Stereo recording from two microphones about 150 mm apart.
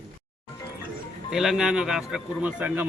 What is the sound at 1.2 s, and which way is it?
Speech, centre (ahead or behind).